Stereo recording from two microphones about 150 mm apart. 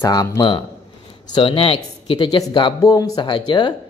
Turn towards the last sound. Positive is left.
turn(degrees=30)  # may be behind; listen again after turning